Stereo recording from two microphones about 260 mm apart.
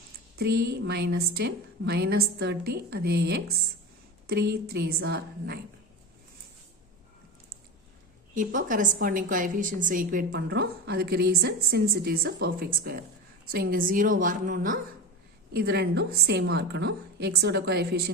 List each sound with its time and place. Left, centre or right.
0.3 s a woman's voice: right
8.4 s a woman's voice: right